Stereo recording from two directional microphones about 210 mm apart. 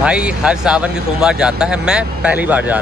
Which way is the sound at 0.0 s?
5° right (ahead or behind).